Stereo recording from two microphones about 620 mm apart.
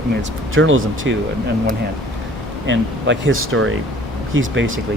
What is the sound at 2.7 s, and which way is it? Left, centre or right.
Speech, centre.